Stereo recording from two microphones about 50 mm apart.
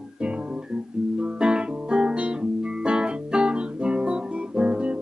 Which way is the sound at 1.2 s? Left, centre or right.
Centre.